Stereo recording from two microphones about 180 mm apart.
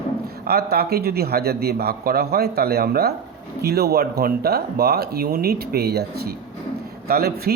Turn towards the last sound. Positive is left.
turn(degrees=-60)  # may be behind; listen again after turning